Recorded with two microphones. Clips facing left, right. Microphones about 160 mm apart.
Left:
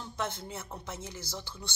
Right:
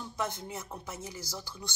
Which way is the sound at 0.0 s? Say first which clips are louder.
Right 1 dB; 10° right (ahead or behind).